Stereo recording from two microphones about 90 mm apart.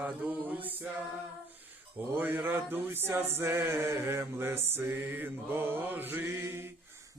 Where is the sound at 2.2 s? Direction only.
20° right (ahead or behind).